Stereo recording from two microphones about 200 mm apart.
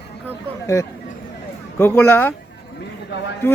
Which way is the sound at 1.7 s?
10° left (ahead or behind).